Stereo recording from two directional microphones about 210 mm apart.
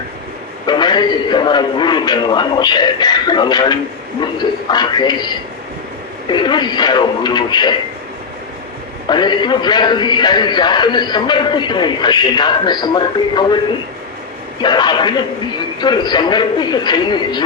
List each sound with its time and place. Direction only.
0.7 s a man's voice: 20° left (ahead or behind)
9.0 s a man's voice: 20° left (ahead or behind)
14.6 s a man's voice: 20° left (ahead or behind)